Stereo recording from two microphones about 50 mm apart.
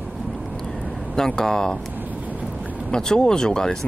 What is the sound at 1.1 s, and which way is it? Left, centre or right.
Speech, centre.